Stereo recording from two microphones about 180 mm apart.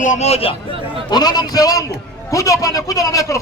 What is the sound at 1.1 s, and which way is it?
A man's voice, 20° left (ahead or behind).